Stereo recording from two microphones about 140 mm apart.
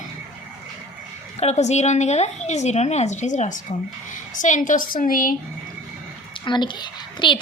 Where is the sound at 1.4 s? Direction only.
50° left (ahead or behind); by 5.4 s 85° left.